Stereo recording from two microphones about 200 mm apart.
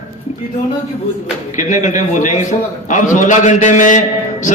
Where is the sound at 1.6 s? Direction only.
40° left (ahead or behind).